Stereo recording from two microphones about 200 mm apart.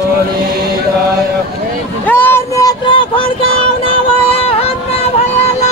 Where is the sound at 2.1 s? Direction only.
10° left (ahead or behind).